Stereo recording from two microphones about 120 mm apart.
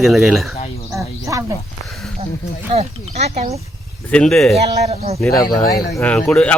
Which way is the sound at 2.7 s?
60° right (ahead or behind).